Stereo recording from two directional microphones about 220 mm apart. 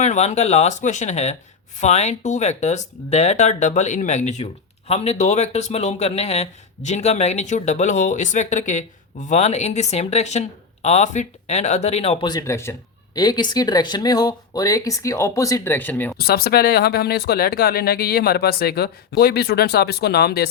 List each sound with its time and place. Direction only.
0.0 s speech: 30° left (ahead or behind); by 16.1 s 10° left (ahead or behind)
16.1 s speech: 45° left (ahead or behind)